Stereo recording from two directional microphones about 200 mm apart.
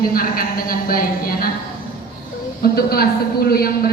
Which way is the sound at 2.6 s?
50° left (ahead or behind).